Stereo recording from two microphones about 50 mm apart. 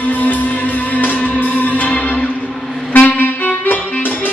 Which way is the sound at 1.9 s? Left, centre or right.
Left.